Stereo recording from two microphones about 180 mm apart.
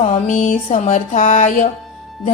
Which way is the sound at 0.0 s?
40° left (ahead or behind).